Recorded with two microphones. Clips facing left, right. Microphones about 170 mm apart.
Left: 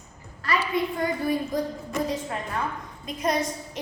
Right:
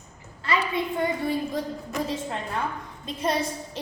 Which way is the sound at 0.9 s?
25° right (ahead or behind).